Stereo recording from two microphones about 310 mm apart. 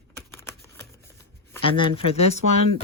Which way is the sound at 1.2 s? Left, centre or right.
Centre.